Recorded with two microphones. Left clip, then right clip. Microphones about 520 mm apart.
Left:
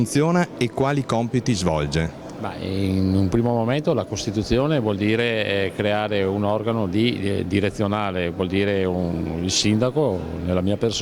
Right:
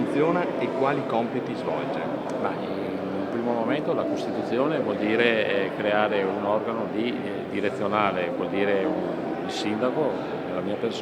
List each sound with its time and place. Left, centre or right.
0.2 s speech: left
3.7 s speech: left